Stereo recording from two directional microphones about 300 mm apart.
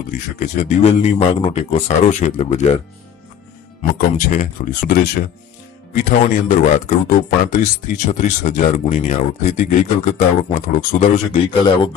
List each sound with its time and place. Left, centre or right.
0.1 s speech: left
4.2 s speech: left